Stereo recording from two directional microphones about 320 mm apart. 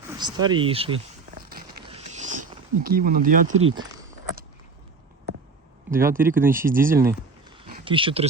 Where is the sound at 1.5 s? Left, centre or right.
Right.